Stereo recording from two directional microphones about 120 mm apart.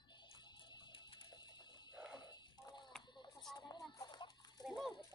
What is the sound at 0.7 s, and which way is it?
Music, 45° left (ahead or behind).